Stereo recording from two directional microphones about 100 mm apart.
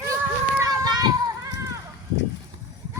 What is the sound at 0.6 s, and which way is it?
Children playing, 40° right (ahead or behind).